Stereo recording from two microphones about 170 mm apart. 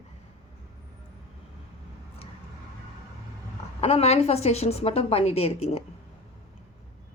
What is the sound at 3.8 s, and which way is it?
Speech, 35° left (ahead or behind).